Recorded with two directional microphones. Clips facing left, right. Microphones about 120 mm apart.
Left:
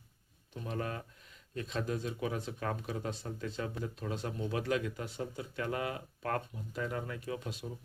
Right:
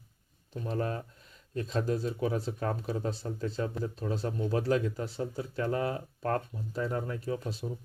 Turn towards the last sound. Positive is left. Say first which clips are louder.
# right 5 dB
turn(degrees=-35)  # may be behind; listen again after turning